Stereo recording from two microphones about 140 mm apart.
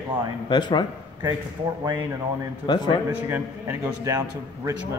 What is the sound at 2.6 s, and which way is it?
Speech, 30° left (ahead or behind).